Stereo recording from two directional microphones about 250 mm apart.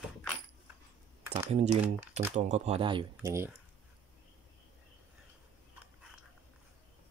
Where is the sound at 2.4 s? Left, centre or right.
Right.